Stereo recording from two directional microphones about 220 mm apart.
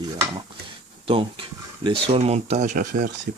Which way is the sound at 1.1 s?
25° right (ahead or behind).